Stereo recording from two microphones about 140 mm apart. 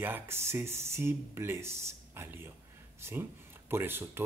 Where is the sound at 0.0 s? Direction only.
15° right (ahead or behind).